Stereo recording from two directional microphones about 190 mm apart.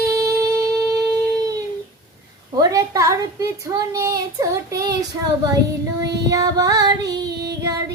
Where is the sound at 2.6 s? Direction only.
20° right (ahead or behind).